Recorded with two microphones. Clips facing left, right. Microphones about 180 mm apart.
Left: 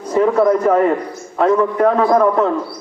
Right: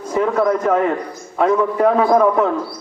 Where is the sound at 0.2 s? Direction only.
5° left (ahead or behind).